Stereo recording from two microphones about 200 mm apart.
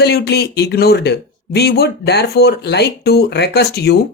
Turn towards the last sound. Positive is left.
turn(degrees=55)  # may be behind; listen again after turning